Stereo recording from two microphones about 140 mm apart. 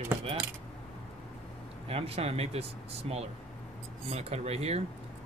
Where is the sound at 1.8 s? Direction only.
45° right (ahead or behind).